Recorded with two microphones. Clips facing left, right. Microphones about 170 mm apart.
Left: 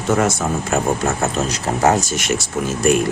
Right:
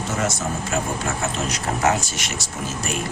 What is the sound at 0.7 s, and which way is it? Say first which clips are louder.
Speech: left 5 dB; 50° left (ahead or behind).